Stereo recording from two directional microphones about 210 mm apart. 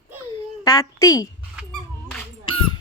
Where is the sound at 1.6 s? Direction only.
5° right (ahead or behind).